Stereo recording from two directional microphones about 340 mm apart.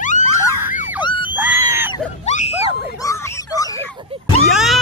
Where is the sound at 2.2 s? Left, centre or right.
Centre.